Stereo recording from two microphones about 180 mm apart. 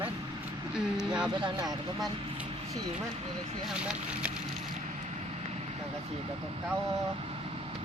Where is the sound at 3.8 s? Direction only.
5° right (ahead or behind).